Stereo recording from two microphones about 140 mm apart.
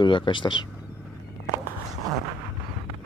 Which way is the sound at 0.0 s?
35° left (ahead or behind).